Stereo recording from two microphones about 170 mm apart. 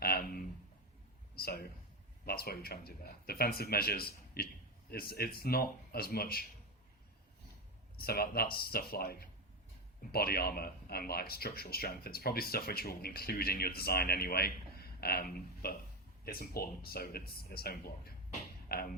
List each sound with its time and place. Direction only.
0.0 s a sound: 65° left (ahead or behind)
1.4 s speech: 65° left (ahead or behind)
7.9 s speech: 65° left (ahead or behind)